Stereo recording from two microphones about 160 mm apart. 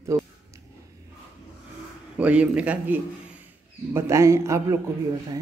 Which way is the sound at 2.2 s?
10° right (ahead or behind).